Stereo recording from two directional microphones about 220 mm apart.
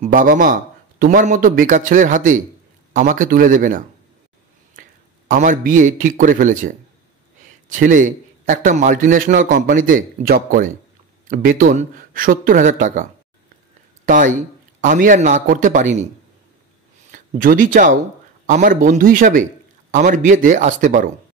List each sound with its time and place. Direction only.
0.0 s a man's voice: 40° right (ahead or behind)
5.3 s a man's voice: 35° right (ahead or behind)
7.7 s a man's voice: 35° right (ahead or behind)
17.1 s a man's voice: 40° right (ahead or behind)